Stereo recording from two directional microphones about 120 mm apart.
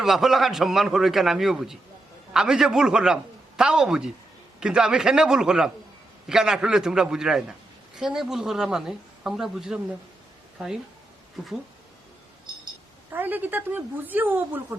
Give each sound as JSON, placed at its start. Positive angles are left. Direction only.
{"t": 0.0, "sound": "speech", "side_deg": 0}
{"t": 13.1, "sound": "speech", "side_deg": -15}